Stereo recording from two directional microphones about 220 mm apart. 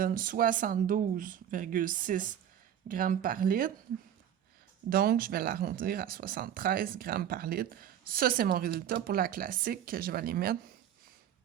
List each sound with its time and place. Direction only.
0.0 s speech: 40° right (ahead or behind)
4.9 s speech: 40° right (ahead or behind)